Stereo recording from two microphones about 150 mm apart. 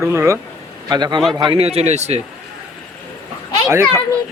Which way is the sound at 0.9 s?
30° right (ahead or behind).